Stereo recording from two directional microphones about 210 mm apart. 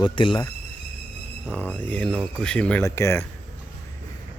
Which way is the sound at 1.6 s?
10° left (ahead or behind).